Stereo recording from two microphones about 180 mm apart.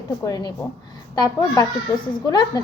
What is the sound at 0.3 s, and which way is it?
Speech, 20° left (ahead or behind).